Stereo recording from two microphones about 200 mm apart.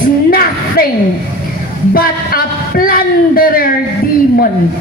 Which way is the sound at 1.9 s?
45° left (ahead or behind).